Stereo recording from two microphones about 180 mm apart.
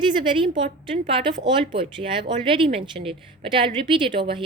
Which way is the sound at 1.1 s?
25° right (ahead or behind).